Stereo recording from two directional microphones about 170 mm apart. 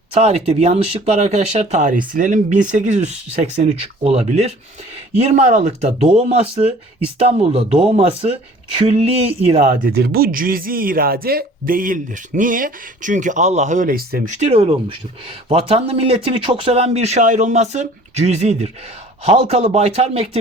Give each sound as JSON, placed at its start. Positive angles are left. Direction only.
{"t": 0.1, "sound": "speech", "side_deg": -40}
{"t": 9.8, "sound": "speech", "side_deg": -70}
{"t": 14.3, "sound": "speech", "side_deg": -40}